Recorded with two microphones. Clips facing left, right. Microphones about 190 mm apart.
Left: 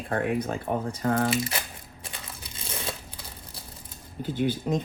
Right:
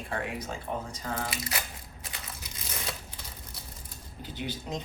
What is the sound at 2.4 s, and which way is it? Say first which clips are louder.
Crushing: left 4 dB; 25° left (ahead or behind).